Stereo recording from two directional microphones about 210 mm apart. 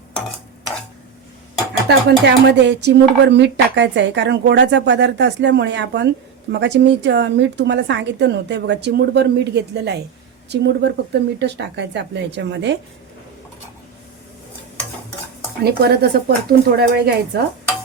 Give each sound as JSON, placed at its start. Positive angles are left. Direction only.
{"t": 1.9, "sound": "speech", "side_deg": -50}
{"t": 15.6, "sound": "speech", "side_deg": -50}